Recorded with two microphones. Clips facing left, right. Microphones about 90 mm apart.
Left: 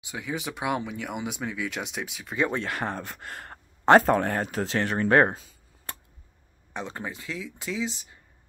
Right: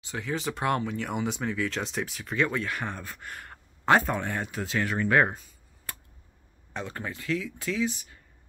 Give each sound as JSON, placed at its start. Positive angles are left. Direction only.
{"t": 0.0, "sound": "speech", "side_deg": 10}
{"t": 2.5, "sound": "speech", "side_deg": 30}
{"t": 6.7, "sound": "speech", "side_deg": 20}